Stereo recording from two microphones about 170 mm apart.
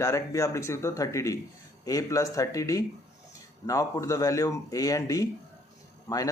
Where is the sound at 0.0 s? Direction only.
20° left (ahead or behind).